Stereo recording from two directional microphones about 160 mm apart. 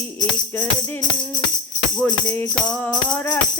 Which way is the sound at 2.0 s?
20° left (ahead or behind).